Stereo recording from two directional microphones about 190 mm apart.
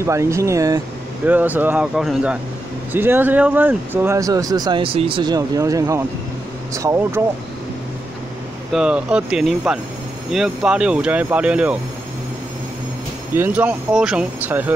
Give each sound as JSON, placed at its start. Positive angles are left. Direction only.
{"t": 0.0, "sound": "speech", "side_deg": -15}
{"t": 8.7, "sound": "speech", "side_deg": -5}
{"t": 13.3, "sound": "speech", "side_deg": -10}